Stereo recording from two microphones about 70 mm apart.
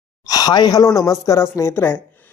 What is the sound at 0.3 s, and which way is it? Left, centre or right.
Speech, left.